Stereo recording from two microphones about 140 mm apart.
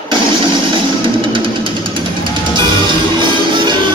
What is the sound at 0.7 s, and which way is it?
Music, 35° right (ahead or behind).